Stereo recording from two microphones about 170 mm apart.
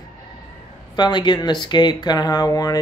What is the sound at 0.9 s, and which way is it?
Speech, 25° left (ahead or behind).